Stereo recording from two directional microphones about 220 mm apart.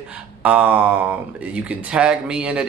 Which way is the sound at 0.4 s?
5° right (ahead or behind).